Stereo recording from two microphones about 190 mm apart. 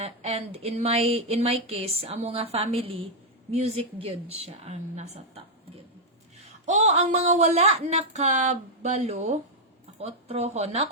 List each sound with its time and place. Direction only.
0.0 s speech: 35° right (ahead or behind)
6.4 s speech: 40° right (ahead or behind)